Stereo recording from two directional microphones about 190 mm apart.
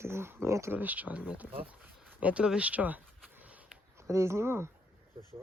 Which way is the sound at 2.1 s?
5° right (ahead or behind).